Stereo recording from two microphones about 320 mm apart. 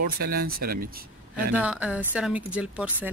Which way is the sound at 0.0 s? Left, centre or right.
Right.